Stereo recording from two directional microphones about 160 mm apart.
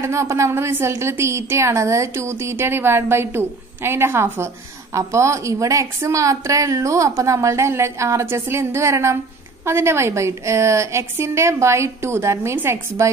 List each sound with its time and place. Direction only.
0.0 s a woman's voice: 15° right (ahead or behind)